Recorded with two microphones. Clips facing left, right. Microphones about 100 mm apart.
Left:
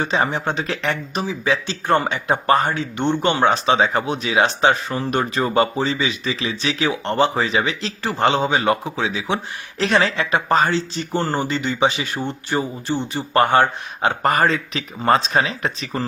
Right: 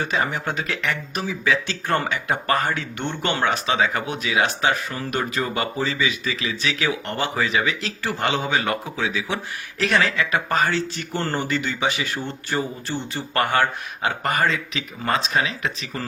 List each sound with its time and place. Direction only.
0.0 s speech: 25° left (ahead or behind)
1.2 s speech: 20° left (ahead or behind); by 16.0 s 35° left (ahead or behind)